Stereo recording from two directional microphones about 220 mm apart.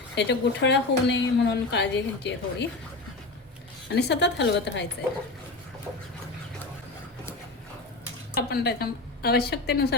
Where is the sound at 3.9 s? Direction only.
50° left (ahead or behind).